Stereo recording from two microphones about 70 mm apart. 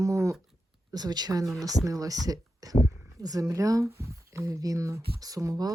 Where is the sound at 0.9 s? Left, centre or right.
Right.